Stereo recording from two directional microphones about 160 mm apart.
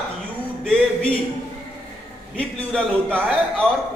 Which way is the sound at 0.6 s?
5° left (ahead or behind).